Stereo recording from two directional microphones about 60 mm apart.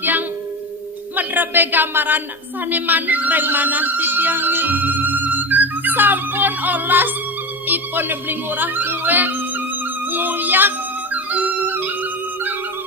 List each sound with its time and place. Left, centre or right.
0.0 s music: right
1.1 s speech: right
11.1 s music: right